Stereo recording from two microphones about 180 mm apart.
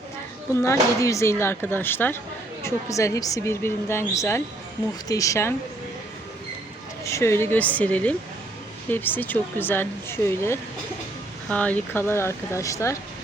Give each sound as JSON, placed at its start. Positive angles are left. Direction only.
{"t": 0.5, "sound": "a woman's voice", "side_deg": 15}
{"t": 7.0, "sound": "a woman's voice", "side_deg": 15}